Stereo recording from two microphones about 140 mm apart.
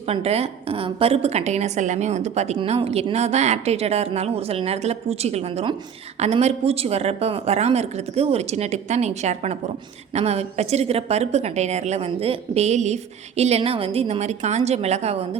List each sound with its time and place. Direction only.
0.1 s a woman's voice: 50° right (ahead or behind)